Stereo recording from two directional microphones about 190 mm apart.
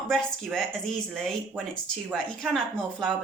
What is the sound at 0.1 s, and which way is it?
Speech, centre (ahead or behind).